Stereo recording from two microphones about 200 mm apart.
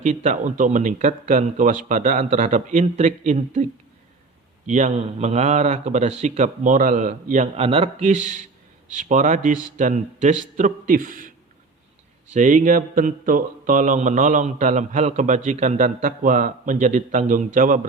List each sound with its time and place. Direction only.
0.0 s speech: 35° right (ahead or behind)
12.3 s speech: 40° right (ahead or behind)